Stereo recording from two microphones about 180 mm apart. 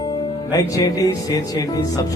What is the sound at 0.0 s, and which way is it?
Music, 25° left (ahead or behind).